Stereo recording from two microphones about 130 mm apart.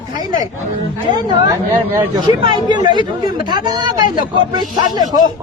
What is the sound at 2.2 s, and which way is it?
A woman's voice, 35° right (ahead or behind).